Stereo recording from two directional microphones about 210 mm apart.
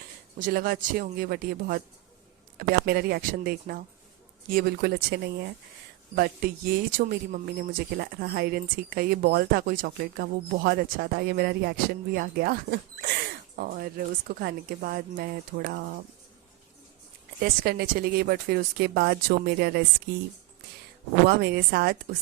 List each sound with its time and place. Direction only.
0.3 s speech: 40° right (ahead or behind)
17.4 s speech: 45° right (ahead or behind)
21.2 s speech: 50° right (ahead or behind)